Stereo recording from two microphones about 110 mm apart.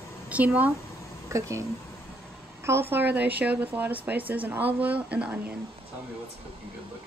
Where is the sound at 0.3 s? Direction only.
15° right (ahead or behind).